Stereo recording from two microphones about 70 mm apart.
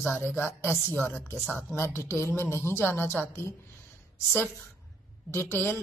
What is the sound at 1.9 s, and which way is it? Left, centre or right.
A woman's voice, left.